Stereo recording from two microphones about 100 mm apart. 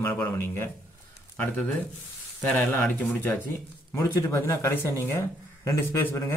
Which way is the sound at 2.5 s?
10° left (ahead or behind).